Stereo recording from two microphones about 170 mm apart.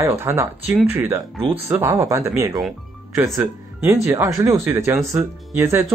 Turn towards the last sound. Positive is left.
turn(degrees=-15)  # may be behind; listen again after turning